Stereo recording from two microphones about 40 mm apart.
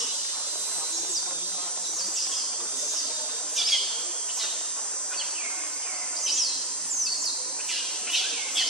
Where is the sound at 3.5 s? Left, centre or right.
Centre.